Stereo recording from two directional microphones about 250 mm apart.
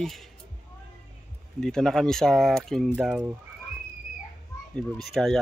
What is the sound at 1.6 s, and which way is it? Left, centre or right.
Speech, centre.